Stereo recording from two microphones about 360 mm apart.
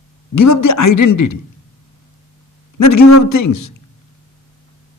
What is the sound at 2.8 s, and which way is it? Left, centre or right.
Speech, left.